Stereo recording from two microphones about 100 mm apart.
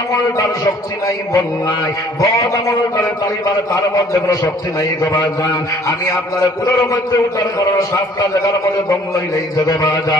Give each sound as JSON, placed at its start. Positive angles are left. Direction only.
{"t": 1.0, "sound": "a man's voice", "side_deg": 35}
{"t": 4.3, "sound": "a man's voice", "side_deg": 35}
{"t": 7.5, "sound": "a man's voice", "side_deg": 40}
{"t": 9.7, "sound": "a man's voice", "side_deg": 35}